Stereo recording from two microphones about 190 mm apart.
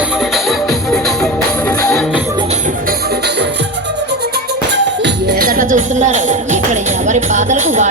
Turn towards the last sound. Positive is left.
turn(degrees=-40)  # may be behind; listen again after turning